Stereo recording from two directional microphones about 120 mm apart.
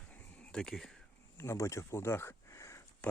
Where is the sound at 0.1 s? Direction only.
10° left (ahead or behind).